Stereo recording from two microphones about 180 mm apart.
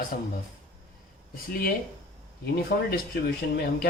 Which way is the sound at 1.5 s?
55° left (ahead or behind).